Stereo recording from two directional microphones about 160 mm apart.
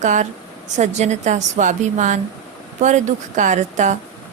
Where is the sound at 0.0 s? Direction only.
50° right (ahead or behind).